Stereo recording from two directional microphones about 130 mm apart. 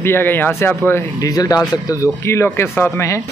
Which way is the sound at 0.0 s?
15° left (ahead or behind).